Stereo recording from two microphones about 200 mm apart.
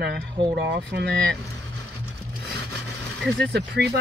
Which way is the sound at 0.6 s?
55° right (ahead or behind).